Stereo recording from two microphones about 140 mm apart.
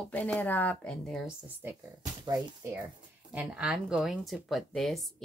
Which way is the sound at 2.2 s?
25° right (ahead or behind).